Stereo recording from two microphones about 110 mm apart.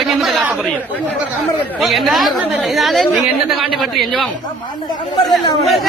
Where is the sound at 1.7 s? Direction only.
Centre (ahead or behind).